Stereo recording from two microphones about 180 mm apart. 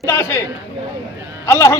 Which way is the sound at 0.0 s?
15° left (ahead or behind).